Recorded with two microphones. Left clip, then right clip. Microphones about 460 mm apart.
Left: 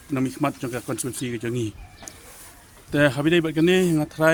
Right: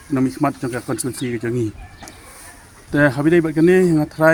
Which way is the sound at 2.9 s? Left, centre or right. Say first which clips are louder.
Right 4 dB; left.